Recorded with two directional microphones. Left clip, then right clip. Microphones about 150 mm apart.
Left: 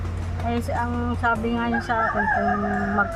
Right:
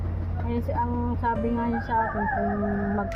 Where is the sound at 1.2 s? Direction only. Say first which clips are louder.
Left 4 dB; 15° left (ahead or behind).